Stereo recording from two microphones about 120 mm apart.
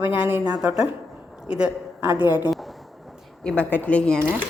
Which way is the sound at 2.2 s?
20° right (ahead or behind).